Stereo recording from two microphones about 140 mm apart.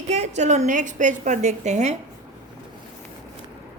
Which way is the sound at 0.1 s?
55° right (ahead or behind).